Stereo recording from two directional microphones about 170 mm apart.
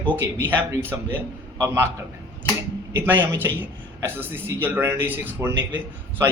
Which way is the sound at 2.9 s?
10° right (ahead or behind).